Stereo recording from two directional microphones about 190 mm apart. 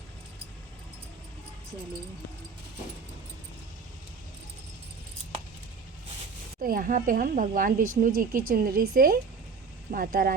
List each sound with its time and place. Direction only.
6.6 s speech: 50° right (ahead or behind)